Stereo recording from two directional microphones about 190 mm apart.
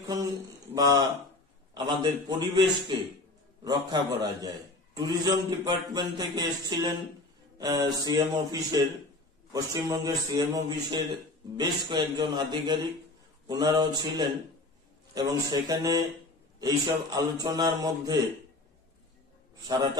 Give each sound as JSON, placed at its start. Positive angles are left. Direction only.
{"t": 0.0, "sound": "speech", "side_deg": -20}